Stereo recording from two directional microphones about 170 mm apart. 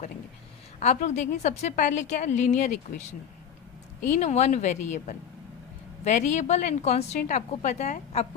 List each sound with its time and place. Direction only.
0.8 s a woman's voice: 45° left (ahead or behind)